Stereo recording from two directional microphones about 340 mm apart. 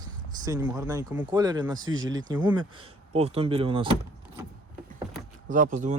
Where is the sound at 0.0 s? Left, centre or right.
Centre.